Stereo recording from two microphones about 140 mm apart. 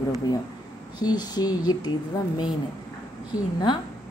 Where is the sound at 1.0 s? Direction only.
30° left (ahead or behind).